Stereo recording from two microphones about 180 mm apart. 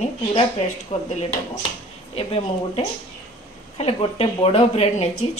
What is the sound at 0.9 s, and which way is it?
Speech, 35° left (ahead or behind).